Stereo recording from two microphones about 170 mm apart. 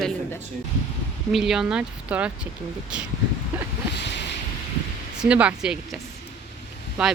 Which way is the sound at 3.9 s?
90° left.